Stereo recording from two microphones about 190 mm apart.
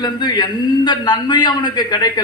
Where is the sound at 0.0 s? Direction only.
20° left (ahead or behind).